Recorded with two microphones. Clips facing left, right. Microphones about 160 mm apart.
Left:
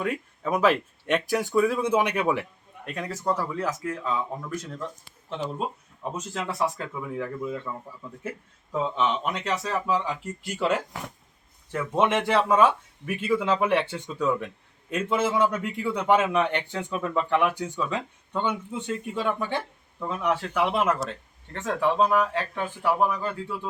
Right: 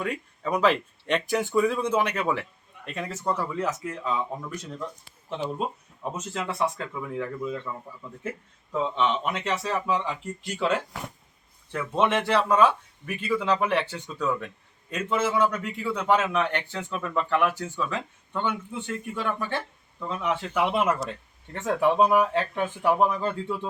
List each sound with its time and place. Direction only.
0.0 s a man's voice: 5° left (ahead or behind)
2.8 s a man's voice: centre (ahead or behind)
3.8 s a man's voice: centre (ahead or behind); by 23.3 s 25° right (ahead or behind)